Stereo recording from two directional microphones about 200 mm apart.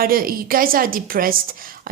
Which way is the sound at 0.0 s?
45° right (ahead or behind).